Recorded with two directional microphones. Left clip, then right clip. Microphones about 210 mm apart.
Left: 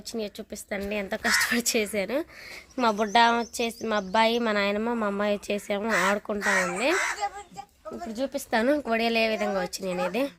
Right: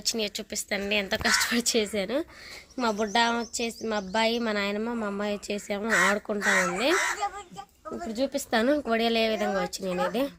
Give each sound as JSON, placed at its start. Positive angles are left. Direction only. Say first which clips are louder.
{"t": 0.0, "sound": "a woman's voice", "louder": "right 4 dB", "side_deg": 5}
{"t": 2.7, "sound": "a woman's voice", "louder": "left 4 dB", "side_deg": 25}
{"t": 6.1, "sound": "a woman's voice", "louder": "even", "side_deg": 5}
{"t": 6.4, "sound": "a woman's voice", "louder": "right 1 dB", "side_deg": -15}